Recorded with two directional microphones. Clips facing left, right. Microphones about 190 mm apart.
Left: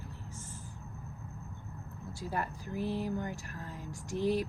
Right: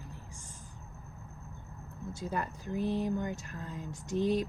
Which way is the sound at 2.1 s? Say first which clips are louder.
Even; 20° right (ahead or behind).